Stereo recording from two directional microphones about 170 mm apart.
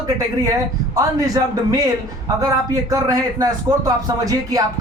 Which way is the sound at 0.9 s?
20° right (ahead or behind).